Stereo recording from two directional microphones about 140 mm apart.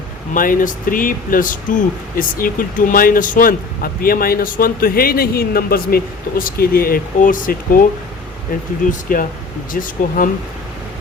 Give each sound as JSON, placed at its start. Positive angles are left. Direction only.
{"t": 0.3, "sound": "speech", "side_deg": 75}
{"t": 4.0, "sound": "speech", "side_deg": 90}
{"t": 8.9, "sound": "speech", "side_deg": 75}